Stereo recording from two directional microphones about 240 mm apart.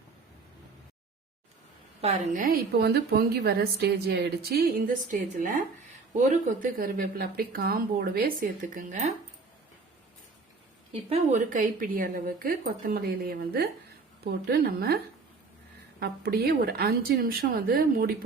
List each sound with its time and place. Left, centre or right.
2.0 s a woman's voice: right
11.1 s a woman's voice: right
16.0 s a woman's voice: right